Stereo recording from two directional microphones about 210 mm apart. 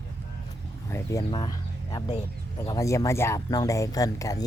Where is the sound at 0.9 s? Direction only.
10° left (ahead or behind).